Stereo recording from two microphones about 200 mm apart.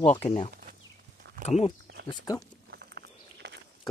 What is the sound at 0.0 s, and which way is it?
Speech, 35° left (ahead or behind).